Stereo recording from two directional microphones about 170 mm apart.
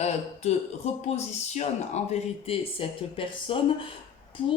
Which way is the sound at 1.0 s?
40° left (ahead or behind).